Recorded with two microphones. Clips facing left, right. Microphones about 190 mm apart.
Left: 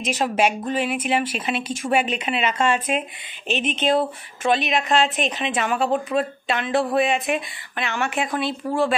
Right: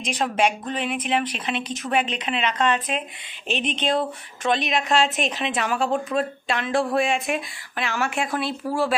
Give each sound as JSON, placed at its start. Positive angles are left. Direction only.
{"t": 0.0, "sound": "a woman's voice", "side_deg": 5}